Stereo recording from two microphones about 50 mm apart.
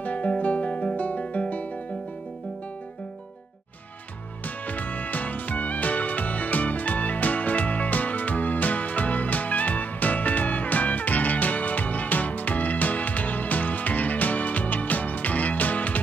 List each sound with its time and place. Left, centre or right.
0.0 s guitar: left
4.6 s music: left